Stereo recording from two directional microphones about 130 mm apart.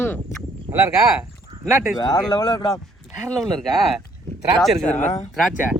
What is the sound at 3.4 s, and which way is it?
Speech, centre (ahead or behind).